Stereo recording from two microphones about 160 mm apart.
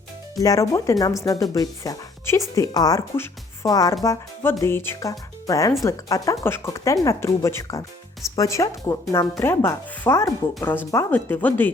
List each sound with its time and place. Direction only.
0.3 s speech: 20° left (ahead or behind)